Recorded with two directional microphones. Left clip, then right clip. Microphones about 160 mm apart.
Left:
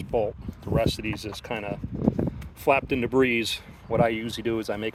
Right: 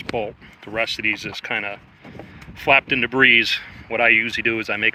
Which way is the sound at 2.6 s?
30° left (ahead or behind).